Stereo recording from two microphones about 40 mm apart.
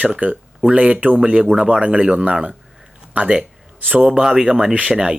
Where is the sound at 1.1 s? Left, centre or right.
Right.